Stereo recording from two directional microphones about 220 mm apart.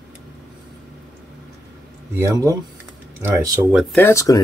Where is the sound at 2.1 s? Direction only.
15° right (ahead or behind).